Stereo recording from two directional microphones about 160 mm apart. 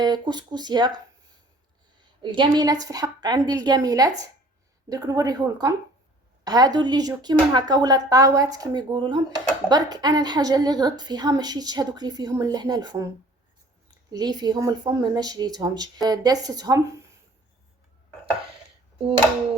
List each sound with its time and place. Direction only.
0.0 s a woman's voice: 25° right (ahead or behind)
2.2 s a woman's voice: 30° right (ahead or behind)
14.1 s a woman's voice: 25° right (ahead or behind)